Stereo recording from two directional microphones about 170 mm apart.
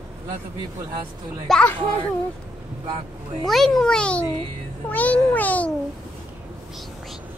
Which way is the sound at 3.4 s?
Centre (ahead or behind).